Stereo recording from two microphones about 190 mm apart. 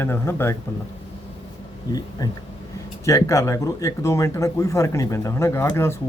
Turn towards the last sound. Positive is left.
turn(degrees=15)  # may be behind; listen again after turning